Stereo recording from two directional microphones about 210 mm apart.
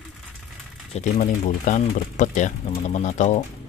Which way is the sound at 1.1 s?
35° left (ahead or behind).